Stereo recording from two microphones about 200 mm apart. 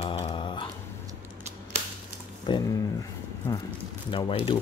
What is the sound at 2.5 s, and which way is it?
Speech, 25° left (ahead or behind).